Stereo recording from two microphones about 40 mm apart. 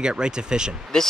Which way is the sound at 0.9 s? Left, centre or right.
Centre.